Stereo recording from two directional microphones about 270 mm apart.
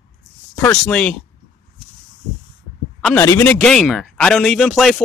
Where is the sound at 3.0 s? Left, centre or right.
Centre.